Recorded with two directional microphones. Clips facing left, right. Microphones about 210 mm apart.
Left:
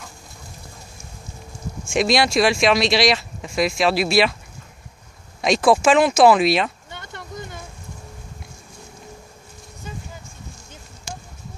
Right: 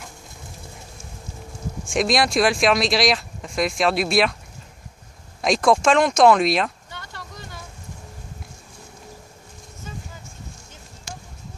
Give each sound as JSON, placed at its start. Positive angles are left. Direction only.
{"t": 1.9, "sound": "speech", "side_deg": 0}
{"t": 5.4, "sound": "speech", "side_deg": 0}
{"t": 6.9, "sound": "a sound", "side_deg": 20}